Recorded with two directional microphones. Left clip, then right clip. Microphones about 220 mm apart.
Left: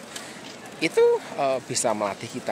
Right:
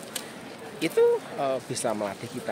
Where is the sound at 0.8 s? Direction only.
15° left (ahead or behind).